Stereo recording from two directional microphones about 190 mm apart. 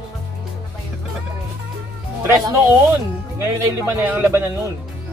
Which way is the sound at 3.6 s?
10° right (ahead or behind).